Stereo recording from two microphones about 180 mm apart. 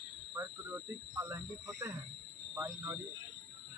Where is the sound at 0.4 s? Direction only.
15° right (ahead or behind).